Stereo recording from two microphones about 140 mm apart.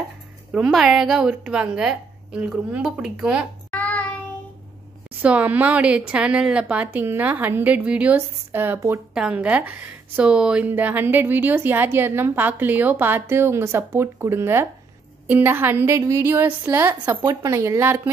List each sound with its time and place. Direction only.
0.5 s a woman's voice: centre (ahead or behind)
3.7 s child singing: 10° left (ahead or behind)
5.2 s a woman's voice: 10° right (ahead or behind)
9.1 s a woman's voice: 5° right (ahead or behind)
17.2 s speech: 25° right (ahead or behind)